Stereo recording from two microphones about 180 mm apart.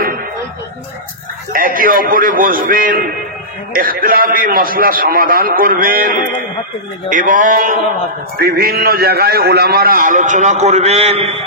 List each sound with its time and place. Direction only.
1.5 s a man's voice: 50° right (ahead or behind)
8.4 s a man's voice: 60° right (ahead or behind); by 11.4 s 35° right (ahead or behind)